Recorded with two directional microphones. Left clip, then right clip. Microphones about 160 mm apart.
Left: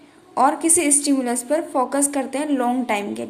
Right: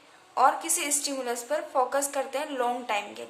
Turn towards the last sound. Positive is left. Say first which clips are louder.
# left 7 dB
turn(degrees=30)  # may be behind; listen again after turning